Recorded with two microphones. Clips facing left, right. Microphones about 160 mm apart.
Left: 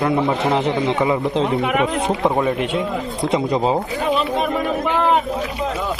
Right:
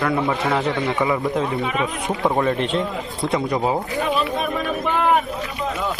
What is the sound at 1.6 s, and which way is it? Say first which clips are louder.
Speech: left 4 dB; 70° left (ahead or behind).